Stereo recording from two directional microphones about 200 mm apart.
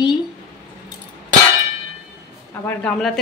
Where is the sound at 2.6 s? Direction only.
5° left (ahead or behind).